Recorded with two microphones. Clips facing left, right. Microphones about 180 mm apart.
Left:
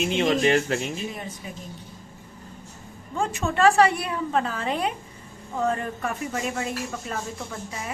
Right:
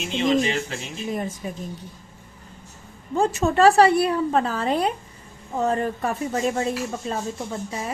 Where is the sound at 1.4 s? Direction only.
45° right (ahead or behind).